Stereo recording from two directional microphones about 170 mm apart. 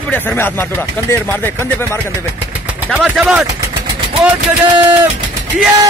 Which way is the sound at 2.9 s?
Centre (ahead or behind).